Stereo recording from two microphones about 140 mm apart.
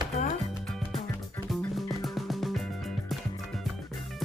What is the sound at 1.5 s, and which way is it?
Music, centre (ahead or behind).